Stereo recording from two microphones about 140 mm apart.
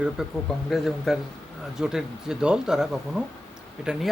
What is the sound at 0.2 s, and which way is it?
Speech, 5° right (ahead or behind).